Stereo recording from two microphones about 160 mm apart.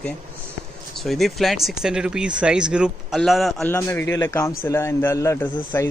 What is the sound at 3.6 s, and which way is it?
A man's voice, 15° left (ahead or behind).